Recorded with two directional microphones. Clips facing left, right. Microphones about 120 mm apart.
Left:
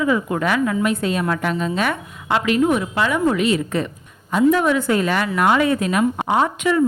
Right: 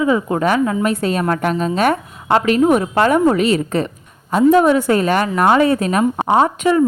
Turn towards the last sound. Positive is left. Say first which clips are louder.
# right 4 dB
turn(degrees=-35)  # may be behind; listen again after turning